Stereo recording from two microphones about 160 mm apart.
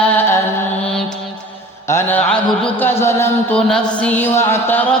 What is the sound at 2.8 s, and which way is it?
Music, 15° left (ahead or behind).